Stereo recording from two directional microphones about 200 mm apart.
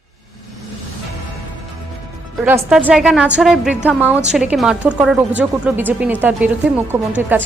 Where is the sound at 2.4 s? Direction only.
5° right (ahead or behind).